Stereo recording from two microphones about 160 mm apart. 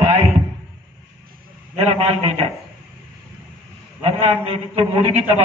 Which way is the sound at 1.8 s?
40° right (ahead or behind).